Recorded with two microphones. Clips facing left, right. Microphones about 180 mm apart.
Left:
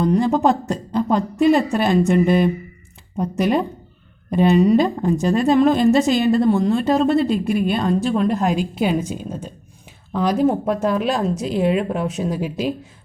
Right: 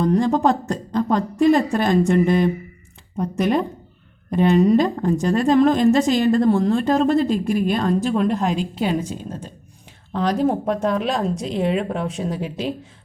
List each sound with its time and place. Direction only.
0.0 s speech: 5° left (ahead or behind)
4.7 s speech: 10° left (ahead or behind)
7.2 s a woman's voice: 40° right (ahead or behind)
7.8 s speech: 5° left (ahead or behind)